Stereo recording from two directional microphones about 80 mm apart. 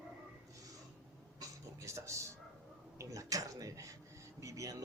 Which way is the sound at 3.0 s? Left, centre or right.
Right.